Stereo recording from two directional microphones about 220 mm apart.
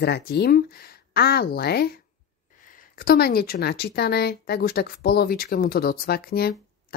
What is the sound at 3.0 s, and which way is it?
Speech, 45° left (ahead or behind).